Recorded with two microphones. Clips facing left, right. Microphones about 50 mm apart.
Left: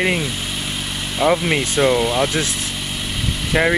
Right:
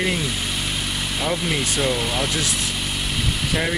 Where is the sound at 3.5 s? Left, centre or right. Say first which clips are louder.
Left 8 dB; left.